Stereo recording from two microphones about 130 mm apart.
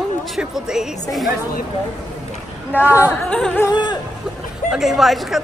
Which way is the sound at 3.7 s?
35° left (ahead or behind).